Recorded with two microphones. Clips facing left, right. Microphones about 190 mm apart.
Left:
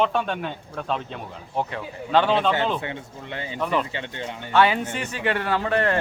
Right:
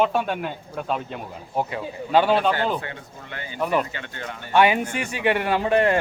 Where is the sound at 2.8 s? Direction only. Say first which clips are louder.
Left 2 dB; 25° left (ahead or behind).